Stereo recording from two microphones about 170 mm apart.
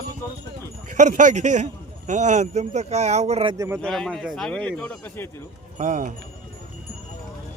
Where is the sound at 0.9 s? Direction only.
45° right (ahead or behind).